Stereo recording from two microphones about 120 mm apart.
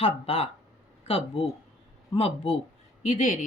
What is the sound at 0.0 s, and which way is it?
Speech, 60° left (ahead or behind).